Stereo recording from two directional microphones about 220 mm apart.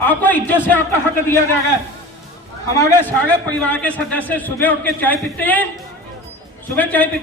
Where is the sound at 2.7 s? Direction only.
10° left (ahead or behind).